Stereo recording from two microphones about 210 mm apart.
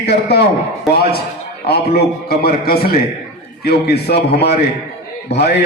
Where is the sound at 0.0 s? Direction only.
50° left (ahead or behind).